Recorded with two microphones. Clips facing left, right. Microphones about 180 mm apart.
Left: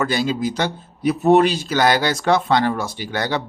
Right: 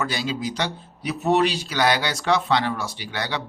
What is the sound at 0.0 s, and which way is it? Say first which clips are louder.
Speech: left 6 dB; 50° left (ahead or behind).